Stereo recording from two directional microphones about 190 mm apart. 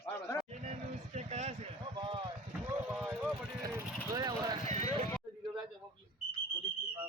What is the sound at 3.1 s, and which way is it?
Speech, 15° right (ahead or behind).